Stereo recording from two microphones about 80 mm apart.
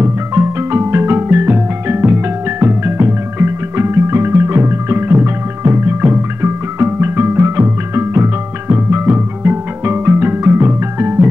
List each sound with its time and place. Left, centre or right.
0.0 s music: right
8.6 s music: right